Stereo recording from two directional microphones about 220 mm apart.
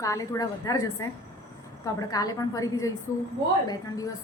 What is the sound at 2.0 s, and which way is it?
A woman's voice, 15° left (ahead or behind).